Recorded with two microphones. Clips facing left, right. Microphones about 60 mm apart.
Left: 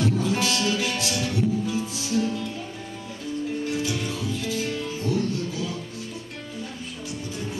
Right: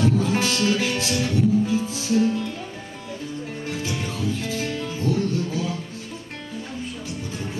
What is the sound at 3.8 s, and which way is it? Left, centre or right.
Music, right.